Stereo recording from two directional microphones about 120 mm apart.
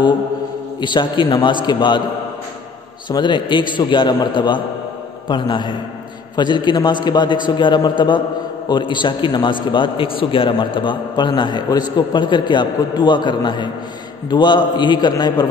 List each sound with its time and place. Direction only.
0.7 s a man's voice: 40° left (ahead or behind)
3.1 s a man's voice: 40° left (ahead or behind)